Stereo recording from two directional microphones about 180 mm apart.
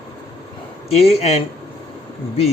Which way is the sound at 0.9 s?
35° left (ahead or behind).